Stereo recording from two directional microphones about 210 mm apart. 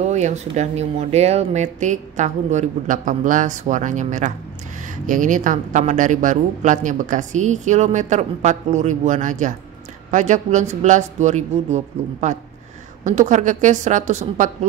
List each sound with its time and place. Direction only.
0.0 s speech: 35° right (ahead or behind)